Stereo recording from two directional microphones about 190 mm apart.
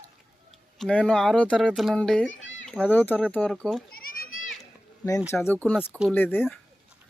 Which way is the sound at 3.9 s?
50° left (ahead or behind).